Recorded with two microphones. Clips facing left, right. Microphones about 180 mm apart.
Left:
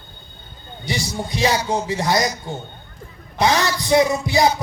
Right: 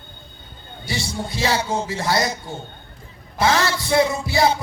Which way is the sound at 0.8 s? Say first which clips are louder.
Left 2 dB; 20° left (ahead or behind).